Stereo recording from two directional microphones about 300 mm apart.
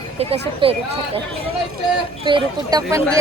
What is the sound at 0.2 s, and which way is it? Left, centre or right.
Speech, centre.